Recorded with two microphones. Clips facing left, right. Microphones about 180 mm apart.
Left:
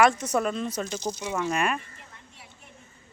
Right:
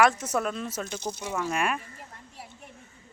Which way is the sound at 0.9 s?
55° right (ahead or behind).